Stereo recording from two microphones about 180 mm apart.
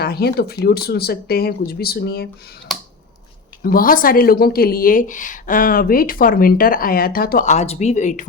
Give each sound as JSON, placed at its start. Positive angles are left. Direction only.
{"t": 0.0, "sound": "speech", "side_deg": 60}
{"t": 3.6, "sound": "speech", "side_deg": 55}